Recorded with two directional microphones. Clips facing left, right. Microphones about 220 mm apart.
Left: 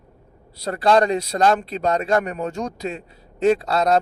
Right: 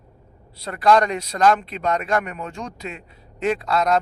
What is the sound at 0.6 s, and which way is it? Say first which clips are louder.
A man's voice: left 1 dB; 35° left (ahead or behind).